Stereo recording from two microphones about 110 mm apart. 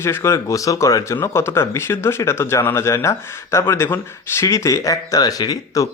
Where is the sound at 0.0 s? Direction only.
25° left (ahead or behind).